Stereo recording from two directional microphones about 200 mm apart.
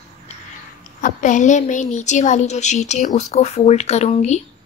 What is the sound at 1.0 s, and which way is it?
A woman's voice, 40° left (ahead or behind).